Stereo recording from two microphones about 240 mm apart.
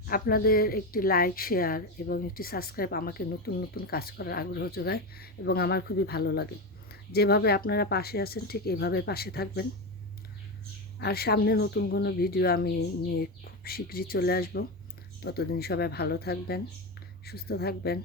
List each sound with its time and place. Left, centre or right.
0.1 s speech: left
11.0 s a woman's voice: left